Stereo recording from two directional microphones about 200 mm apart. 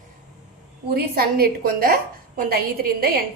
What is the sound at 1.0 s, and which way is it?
A woman's voice, 50° right (ahead or behind).